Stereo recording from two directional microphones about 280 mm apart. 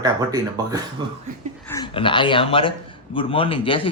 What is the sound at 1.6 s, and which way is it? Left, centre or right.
A man's voice, centre.